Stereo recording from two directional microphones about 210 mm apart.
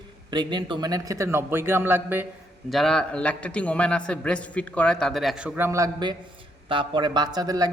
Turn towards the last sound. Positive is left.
turn(degrees=-20)  # may be behind; listen again after turning